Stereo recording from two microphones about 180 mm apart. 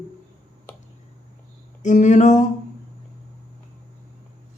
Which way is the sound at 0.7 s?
10° left (ahead or behind).